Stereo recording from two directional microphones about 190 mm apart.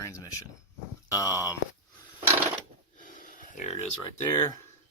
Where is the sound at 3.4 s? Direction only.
40° left (ahead or behind).